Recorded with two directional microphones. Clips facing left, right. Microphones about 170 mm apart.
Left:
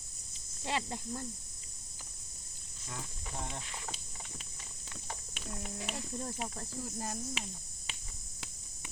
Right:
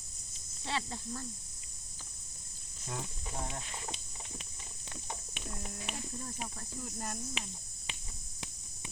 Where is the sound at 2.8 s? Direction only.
25° right (ahead or behind).